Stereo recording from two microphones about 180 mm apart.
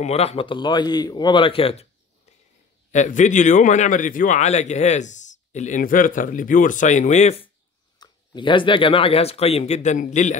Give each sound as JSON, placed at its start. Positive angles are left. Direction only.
{"t": 0.0, "sound": "speech", "side_deg": 35}
{"t": 2.9, "sound": "speech", "side_deg": 40}